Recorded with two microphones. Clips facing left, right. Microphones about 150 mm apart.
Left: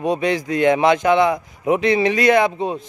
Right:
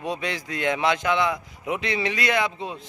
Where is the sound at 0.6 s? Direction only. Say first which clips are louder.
Left 8 dB; 50° left (ahead or behind).